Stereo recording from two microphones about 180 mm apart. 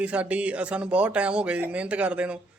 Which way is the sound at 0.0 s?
5° right (ahead or behind).